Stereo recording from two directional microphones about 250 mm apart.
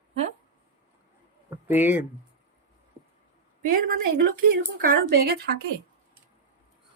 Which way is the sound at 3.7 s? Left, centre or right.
Right.